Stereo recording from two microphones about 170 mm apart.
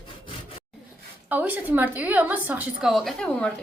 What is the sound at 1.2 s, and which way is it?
A woman's voice, 10° right (ahead or behind).